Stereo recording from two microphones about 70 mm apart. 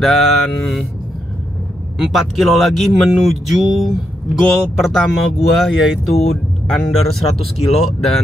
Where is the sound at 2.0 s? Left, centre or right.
Centre.